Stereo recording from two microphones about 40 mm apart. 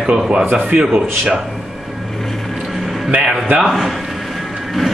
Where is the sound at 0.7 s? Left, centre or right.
Right.